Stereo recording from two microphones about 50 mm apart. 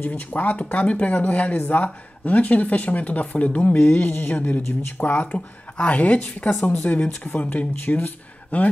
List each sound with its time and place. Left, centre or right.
0.0 s speech: left